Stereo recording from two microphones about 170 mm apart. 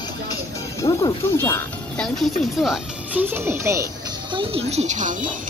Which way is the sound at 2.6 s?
Centre (ahead or behind).